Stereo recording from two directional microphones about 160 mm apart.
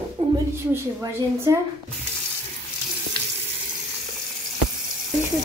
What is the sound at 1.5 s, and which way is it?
Speech, 20° right (ahead or behind).